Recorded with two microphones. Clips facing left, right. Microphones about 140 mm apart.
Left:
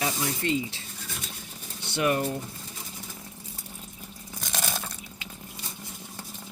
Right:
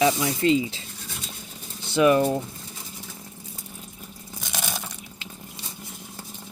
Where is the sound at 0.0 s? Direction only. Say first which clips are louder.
Right 8 dB; 90° right.